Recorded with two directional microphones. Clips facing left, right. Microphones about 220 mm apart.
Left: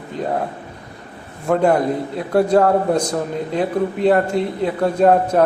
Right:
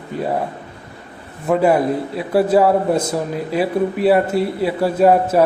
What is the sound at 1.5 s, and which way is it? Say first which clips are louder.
A man's voice: right 1 dB; 5° right (ahead or behind).